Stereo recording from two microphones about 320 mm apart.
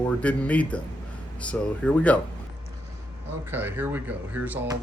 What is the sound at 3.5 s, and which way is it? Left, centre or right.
Speech, centre.